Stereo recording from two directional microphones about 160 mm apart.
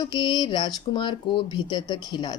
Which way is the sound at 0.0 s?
30° left (ahead or behind).